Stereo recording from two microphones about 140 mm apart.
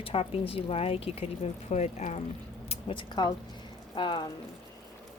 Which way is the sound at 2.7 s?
40° left (ahead or behind).